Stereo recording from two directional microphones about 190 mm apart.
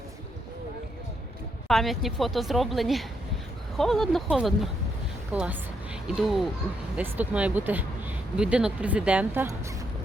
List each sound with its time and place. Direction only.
1.6 s a woman's voice: centre (ahead or behind)